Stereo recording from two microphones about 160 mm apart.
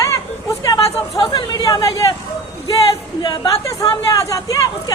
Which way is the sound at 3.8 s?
20° left (ahead or behind).